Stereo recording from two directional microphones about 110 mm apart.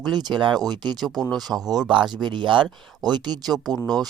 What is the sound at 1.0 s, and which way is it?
Speech, centre (ahead or behind).